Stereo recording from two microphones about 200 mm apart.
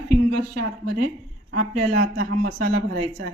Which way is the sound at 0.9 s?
45° right (ahead or behind).